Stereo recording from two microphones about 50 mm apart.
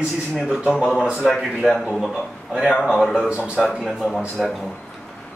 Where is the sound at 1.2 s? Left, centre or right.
Centre.